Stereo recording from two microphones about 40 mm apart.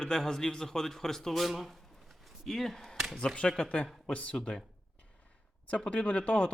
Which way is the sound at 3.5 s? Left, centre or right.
Left.